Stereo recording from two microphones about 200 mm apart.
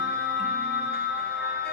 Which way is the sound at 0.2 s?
55° left (ahead or behind).